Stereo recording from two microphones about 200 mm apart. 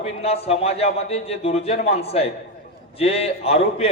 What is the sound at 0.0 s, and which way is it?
A man's voice, 30° left (ahead or behind).